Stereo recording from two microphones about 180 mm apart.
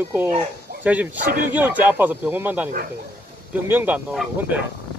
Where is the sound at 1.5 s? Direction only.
10° right (ahead or behind).